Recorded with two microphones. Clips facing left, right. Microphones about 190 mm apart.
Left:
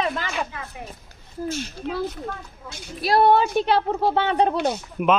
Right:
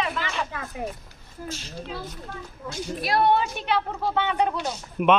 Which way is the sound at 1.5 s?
55° left (ahead or behind).